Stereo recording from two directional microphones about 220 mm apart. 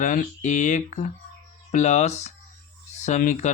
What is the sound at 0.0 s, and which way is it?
Speech, 35° left (ahead or behind).